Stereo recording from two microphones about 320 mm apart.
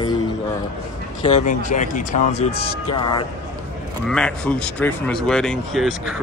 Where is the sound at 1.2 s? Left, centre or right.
Left.